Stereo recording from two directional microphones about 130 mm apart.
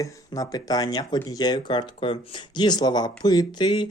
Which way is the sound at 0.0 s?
30° left (ahead or behind).